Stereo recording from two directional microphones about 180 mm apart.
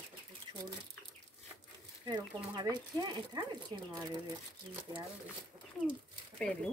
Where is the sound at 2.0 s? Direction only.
25° right (ahead or behind).